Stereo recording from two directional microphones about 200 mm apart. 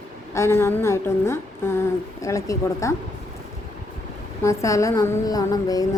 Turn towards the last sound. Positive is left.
turn(degrees=20)  # may be behind; listen again after turning